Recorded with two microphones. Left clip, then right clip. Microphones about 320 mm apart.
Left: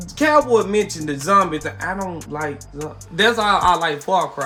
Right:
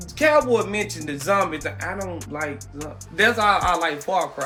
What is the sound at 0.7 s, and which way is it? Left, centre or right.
Speech, left.